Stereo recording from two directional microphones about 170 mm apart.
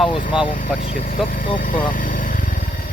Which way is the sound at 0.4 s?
50° left (ahead or behind).